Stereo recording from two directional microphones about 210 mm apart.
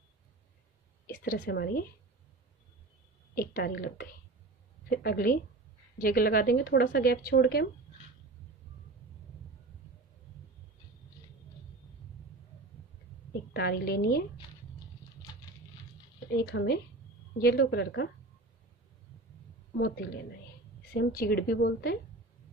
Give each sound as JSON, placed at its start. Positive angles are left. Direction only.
{"t": 1.0, "sound": "speech", "side_deg": 40}
{"t": 3.3, "sound": "a woman's voice", "side_deg": 45}
{"t": 13.5, "sound": "speech", "side_deg": 50}
{"t": 16.3, "sound": "speech", "side_deg": 50}
{"t": 20.9, "sound": "speech", "side_deg": 50}